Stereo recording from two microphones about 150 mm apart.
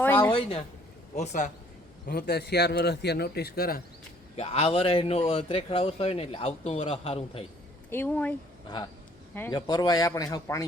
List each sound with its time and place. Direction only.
0.0 s a sound: 15° left (ahead or behind)
0.3 s speech: 35° left (ahead or behind)
1.1 s speech: 50° left (ahead or behind)
2.0 s a man's voice: 90° left
4.4 s speech: 40° left (ahead or behind)
7.9 s speech: 15° left (ahead or behind)
9.5 s speech: 25° left (ahead or behind)